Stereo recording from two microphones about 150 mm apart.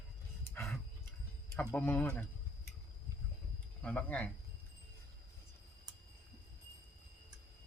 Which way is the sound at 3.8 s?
10° left (ahead or behind).